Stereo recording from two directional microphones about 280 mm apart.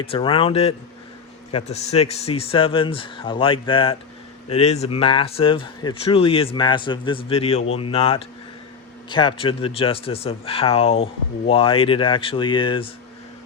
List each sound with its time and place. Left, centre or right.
0.0 s speech: centre